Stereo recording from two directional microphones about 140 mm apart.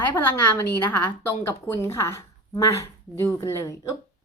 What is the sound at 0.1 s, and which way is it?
A woman's voice, 15° left (ahead or behind).